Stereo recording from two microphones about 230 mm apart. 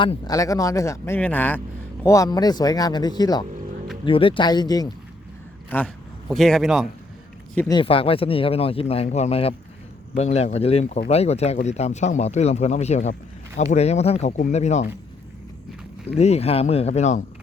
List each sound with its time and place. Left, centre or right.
0.0 s a man's voice: centre
7.8 s speech: left
16.1 s speech: left